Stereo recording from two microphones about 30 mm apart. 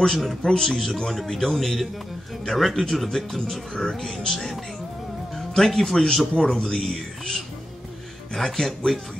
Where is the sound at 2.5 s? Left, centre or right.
Left.